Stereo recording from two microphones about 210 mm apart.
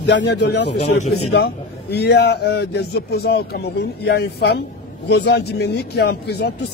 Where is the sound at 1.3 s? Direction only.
50° left (ahead or behind).